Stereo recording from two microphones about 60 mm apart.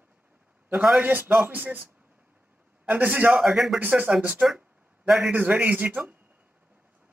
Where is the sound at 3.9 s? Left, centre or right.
Right.